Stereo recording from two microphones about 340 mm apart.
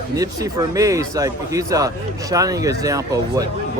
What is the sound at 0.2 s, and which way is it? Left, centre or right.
Speech, centre.